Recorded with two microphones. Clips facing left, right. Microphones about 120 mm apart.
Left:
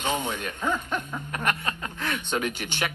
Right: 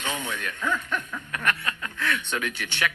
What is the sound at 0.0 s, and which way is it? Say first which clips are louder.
Speech: left 3 dB; 25° left (ahead or behind).